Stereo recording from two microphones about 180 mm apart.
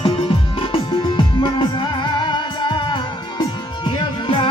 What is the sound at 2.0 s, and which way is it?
Music, 25° left (ahead or behind).